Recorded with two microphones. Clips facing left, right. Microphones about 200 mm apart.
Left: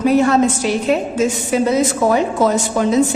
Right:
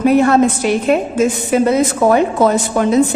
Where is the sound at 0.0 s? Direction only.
55° right (ahead or behind).